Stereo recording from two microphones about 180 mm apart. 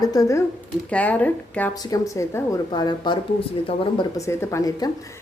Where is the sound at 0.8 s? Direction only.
10° left (ahead or behind).